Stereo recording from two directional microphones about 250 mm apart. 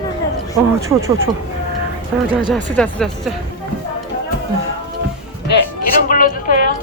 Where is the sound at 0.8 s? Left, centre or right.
Centre.